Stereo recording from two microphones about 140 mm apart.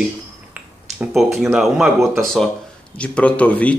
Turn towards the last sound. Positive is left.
turn(degrees=10)  # may be behind; listen again after turning